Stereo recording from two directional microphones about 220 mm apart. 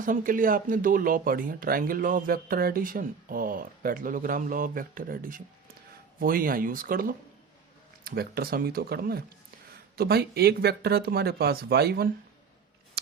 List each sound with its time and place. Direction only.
0.0 s speech: 40° right (ahead or behind)